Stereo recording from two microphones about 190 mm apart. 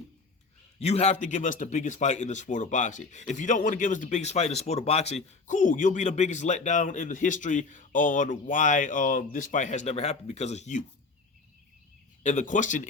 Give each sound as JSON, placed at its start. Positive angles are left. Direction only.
{"t": 0.8, "sound": "speech", "side_deg": 35}
{"t": 12.2, "sound": "speech", "side_deg": 40}